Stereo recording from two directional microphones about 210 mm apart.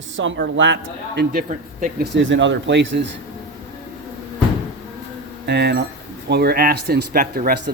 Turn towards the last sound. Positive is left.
turn(degrees=-45)  # may be behind; listen again after turning